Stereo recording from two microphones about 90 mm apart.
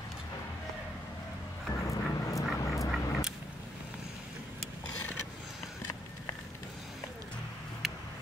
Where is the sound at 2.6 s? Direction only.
35° left (ahead or behind).